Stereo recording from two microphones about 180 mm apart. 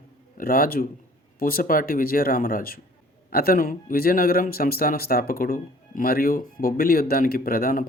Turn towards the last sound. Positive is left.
turn(degrees=55)  # may be behind; listen again after turning